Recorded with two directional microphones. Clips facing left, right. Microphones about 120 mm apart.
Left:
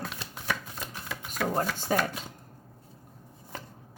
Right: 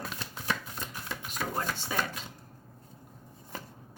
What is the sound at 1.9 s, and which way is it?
Speech, 40° left (ahead or behind).